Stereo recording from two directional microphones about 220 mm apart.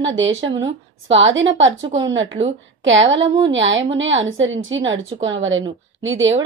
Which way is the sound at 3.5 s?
60° right (ahead or behind).